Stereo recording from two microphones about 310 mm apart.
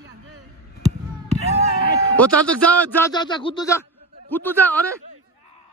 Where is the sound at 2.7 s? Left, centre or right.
Centre.